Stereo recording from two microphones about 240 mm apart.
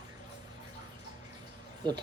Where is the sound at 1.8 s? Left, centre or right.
Centre.